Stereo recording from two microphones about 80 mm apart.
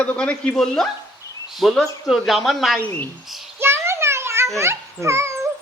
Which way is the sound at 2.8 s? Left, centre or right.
Left.